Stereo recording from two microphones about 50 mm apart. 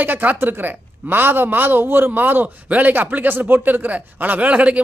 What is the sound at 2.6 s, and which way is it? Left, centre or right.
Speech, right.